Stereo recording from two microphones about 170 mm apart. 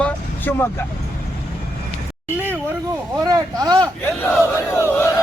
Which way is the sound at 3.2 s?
20° right (ahead or behind).